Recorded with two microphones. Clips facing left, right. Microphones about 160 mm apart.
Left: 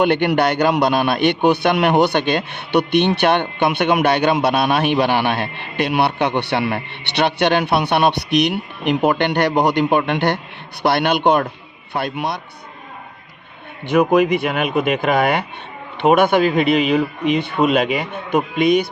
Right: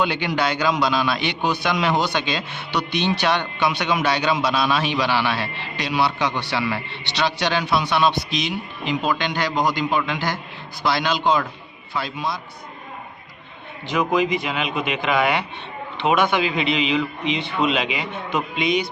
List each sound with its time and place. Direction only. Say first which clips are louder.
0.0 s a man's voice: left 6 dB; 60° left (ahead or behind)
13.8 s speech: left 6 dB; 55° left (ahead or behind)